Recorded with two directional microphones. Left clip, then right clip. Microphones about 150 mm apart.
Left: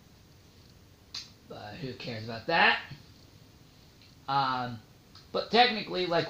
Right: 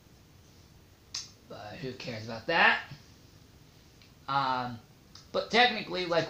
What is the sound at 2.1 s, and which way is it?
Speech, 60° left (ahead or behind).